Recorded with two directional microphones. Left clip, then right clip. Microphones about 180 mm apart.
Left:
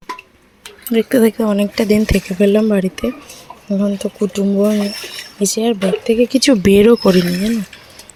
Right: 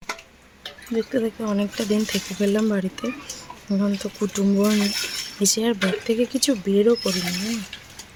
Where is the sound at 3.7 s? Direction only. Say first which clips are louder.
Left 7 dB; 10° left (ahead or behind).